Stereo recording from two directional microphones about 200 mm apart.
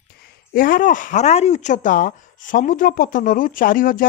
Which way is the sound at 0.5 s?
45° left (ahead or behind).